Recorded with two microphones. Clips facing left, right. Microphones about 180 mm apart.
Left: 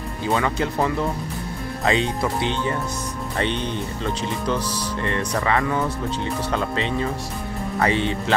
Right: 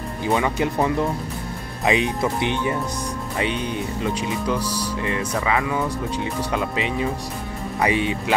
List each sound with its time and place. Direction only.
0.3 s speech: 15° right (ahead or behind)